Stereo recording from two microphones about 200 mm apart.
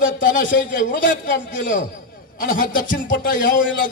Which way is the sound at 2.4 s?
45° left (ahead or behind).